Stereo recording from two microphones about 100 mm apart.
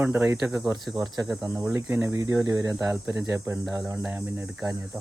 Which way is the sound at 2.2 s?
35° right (ahead or behind).